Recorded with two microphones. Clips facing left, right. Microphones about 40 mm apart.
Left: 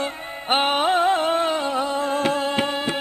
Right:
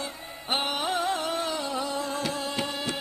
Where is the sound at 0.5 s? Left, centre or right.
Left.